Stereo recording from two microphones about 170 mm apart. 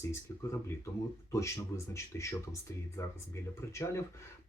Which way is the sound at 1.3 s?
15° left (ahead or behind).